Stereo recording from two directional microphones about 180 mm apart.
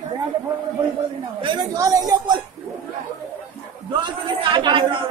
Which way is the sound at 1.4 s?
25° right (ahead or behind).